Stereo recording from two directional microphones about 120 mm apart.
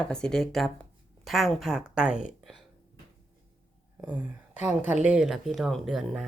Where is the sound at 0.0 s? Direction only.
5° left (ahead or behind).